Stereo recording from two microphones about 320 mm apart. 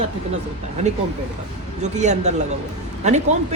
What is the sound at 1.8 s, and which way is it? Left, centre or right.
A woman's voice, right.